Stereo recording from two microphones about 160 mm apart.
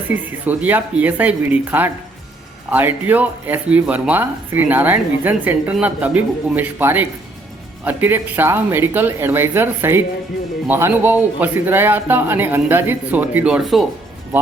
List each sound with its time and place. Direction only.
0.1 s speech: 10° right (ahead or behind)